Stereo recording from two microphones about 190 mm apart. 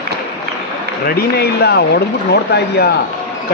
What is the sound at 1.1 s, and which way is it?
A man's voice, 55° left (ahead or behind).